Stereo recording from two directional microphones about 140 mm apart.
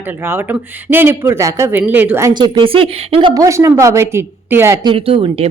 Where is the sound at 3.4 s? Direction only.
20° right (ahead or behind).